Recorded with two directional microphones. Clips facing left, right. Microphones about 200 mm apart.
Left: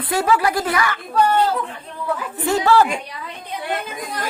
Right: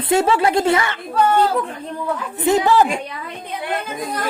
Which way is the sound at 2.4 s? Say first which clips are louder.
Right 1 dB; 20° right (ahead or behind).